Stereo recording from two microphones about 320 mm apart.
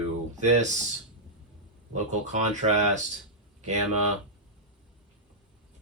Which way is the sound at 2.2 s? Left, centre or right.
Right.